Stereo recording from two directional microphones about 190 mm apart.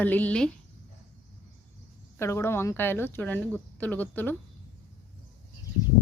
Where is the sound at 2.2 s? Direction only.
15° left (ahead or behind).